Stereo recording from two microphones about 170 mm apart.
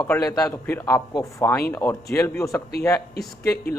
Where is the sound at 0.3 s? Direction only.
15° left (ahead or behind).